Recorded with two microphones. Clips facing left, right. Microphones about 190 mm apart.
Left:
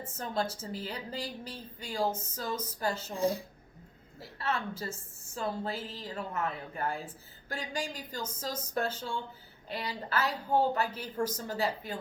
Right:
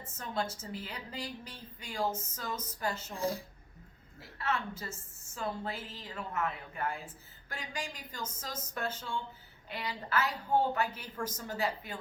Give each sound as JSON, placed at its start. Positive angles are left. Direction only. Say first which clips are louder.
{"t": 0.2, "sound": "a woman's voice", "louder": "left 3 dB", "side_deg": 35}
{"t": 3.2, "sound": "speech", "louder": "left 5 dB", "side_deg": 20}
{"t": 4.2, "sound": "a woman's voice", "louder": "left 1 dB", "side_deg": 35}